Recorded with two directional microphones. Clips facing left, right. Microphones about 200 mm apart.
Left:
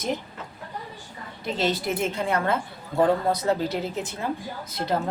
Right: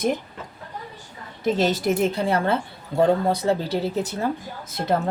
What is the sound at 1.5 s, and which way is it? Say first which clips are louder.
Speech: right 3 dB; 45° right (ahead or behind).